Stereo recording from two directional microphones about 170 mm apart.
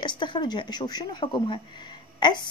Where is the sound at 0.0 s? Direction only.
30° left (ahead or behind).